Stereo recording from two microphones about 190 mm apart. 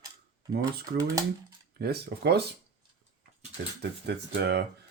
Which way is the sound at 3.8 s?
60° right (ahead or behind).